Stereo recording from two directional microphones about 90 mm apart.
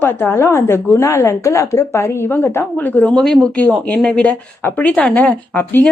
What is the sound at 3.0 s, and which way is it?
A woman's voice, 5° left (ahead or behind).